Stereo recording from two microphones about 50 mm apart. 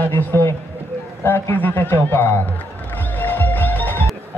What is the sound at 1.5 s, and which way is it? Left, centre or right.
Speech, left.